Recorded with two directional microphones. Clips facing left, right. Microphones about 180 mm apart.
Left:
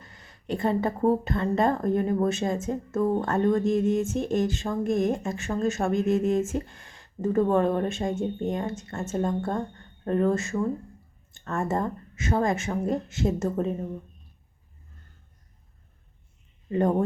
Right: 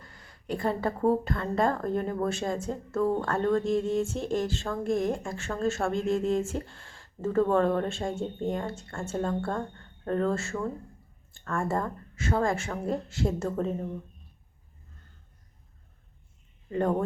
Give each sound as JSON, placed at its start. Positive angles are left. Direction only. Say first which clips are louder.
{"t": 0.0, "sound": "a woman's voice", "louder": "left 2 dB", "side_deg": 20}